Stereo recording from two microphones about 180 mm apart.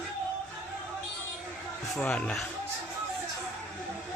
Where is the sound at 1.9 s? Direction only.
5° left (ahead or behind).